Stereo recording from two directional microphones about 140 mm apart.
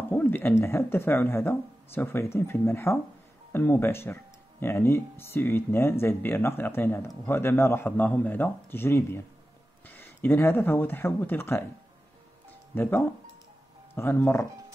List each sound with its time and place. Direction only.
0.1 s speech: 15° left (ahead or behind)
12.7 s speech: 15° left (ahead or behind)
13.9 s speech: 15° left (ahead or behind)